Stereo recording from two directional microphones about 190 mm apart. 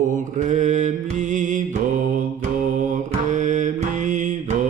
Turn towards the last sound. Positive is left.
turn(degrees=-40)  # may be behind; listen again after turning